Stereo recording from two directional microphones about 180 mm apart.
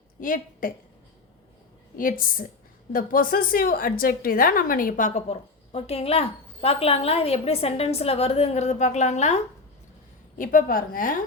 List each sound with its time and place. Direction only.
0.2 s a woman's voice: 50° left (ahead or behind)
2.0 s a woman's voice: 50° left (ahead or behind)